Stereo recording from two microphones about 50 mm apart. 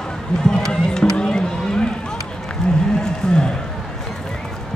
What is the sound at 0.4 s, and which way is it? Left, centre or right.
Run, centre.